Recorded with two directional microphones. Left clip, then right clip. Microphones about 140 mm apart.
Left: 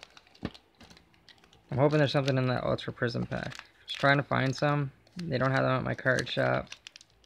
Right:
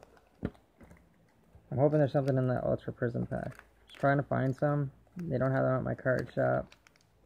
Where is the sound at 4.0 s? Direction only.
45° left (ahead or behind).